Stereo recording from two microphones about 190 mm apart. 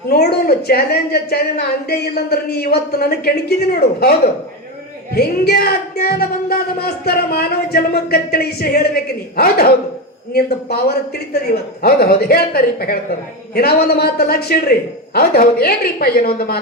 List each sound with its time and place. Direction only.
0.1 s a woman's voice: 55° left (ahead or behind)
5.1 s a woman's voice: 55° left (ahead or behind)